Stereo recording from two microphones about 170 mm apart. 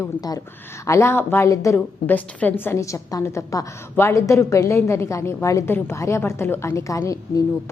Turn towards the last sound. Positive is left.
turn(degrees=20)  # may be behind; listen again after turning